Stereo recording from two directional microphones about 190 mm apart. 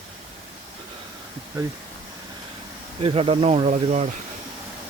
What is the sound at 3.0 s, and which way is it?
Speech, 30° right (ahead or behind).